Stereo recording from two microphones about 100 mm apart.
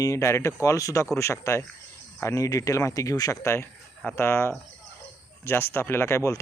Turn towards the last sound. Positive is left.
turn(degrees=30)  # may be behind; listen again after turning